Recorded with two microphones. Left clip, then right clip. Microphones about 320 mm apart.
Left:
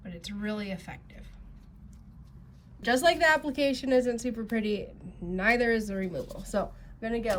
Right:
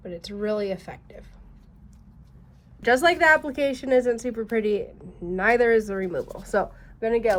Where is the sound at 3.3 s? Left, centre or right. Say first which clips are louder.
Right 4 dB; centre.